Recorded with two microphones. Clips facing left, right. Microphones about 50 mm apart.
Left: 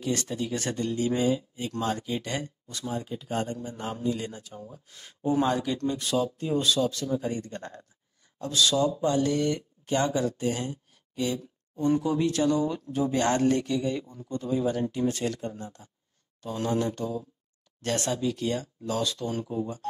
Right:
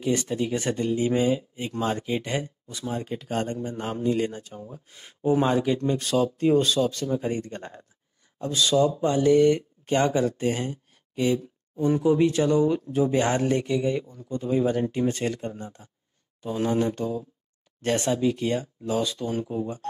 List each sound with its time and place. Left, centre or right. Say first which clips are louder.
0.0 s speech: right 4 dB; centre
2.2 s speech: right 4 dB; centre
2.9 s speech: right 3 dB; right
3.2 s speech: right 3 dB; right; by 5.9 s centre
5.9 s speech: right 4 dB; right
11.7 s speech: right 4 dB; centre
19.5 s speech: right 2 dB; right